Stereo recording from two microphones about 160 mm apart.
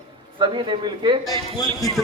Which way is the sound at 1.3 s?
20° left (ahead or behind).